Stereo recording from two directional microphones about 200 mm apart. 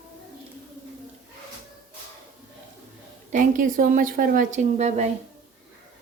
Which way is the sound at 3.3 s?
40° right (ahead or behind).